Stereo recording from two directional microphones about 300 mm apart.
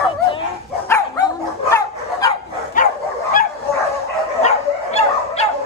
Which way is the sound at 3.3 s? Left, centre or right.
Left.